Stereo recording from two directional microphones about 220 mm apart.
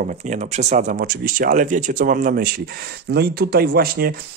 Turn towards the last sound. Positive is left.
turn(degrees=-45)  # may be behind; listen again after turning